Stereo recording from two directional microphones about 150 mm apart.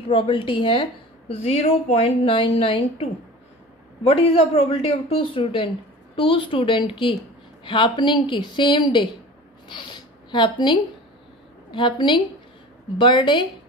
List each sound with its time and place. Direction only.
0.1 s speech: 35° left (ahead or behind)
1.3 s speech: 45° left (ahead or behind)
2.0 s speech: 35° left (ahead or behind)
9.7 s a sound: 30° left (ahead or behind)
11.7 s speech: 30° left (ahead or behind)